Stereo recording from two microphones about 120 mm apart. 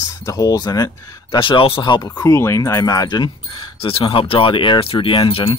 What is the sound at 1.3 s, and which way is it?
Speech, 45° left (ahead or behind).